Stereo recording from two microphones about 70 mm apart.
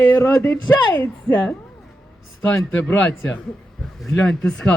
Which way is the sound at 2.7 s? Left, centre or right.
Left.